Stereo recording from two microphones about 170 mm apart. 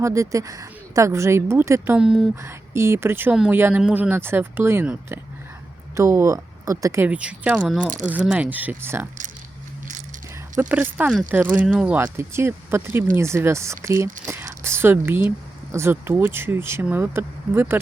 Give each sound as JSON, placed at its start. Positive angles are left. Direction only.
{"t": 0.0, "sound": "speech", "side_deg": -20}
{"t": 2.0, "sound": "speech", "side_deg": -5}
{"t": 2.3, "sound": "speech", "side_deg": -15}
{"t": 10.6, "sound": "speech", "side_deg": -10}